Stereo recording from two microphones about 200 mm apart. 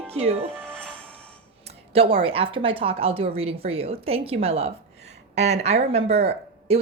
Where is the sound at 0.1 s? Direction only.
30° right (ahead or behind).